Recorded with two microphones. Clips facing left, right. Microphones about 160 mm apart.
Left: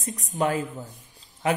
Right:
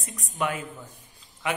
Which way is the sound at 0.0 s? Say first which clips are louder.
Left 4 dB; 35° left (ahead or behind).